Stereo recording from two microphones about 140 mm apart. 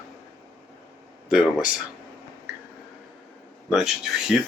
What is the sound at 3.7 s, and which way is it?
Speech, 5° right (ahead or behind).